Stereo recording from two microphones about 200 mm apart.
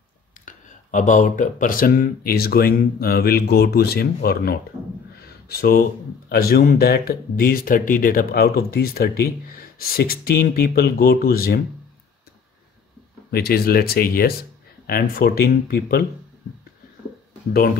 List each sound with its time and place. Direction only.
0.5 s speech: 40° left (ahead or behind)
13.3 s speech: 50° left (ahead or behind)